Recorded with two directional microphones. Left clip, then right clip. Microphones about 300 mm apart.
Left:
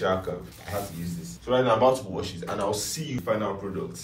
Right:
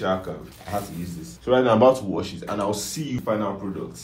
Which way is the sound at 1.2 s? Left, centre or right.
Right.